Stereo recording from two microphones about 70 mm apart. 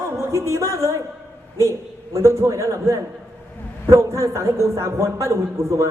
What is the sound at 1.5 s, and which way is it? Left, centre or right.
A man's voice, right.